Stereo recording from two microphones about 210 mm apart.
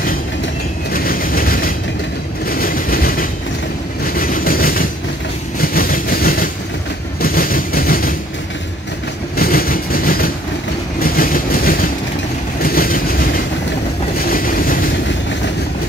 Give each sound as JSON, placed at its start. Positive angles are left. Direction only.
{"t": 0.9, "sound": "vehicle", "side_deg": 45}
{"t": 4.0, "sound": "train", "side_deg": 45}
{"t": 9.4, "sound": "train", "side_deg": 45}
{"t": 11.0, "sound": "vehicle", "side_deg": 45}
{"t": 12.6, "sound": "train", "side_deg": 45}
{"t": 14.1, "sound": "boat", "side_deg": 45}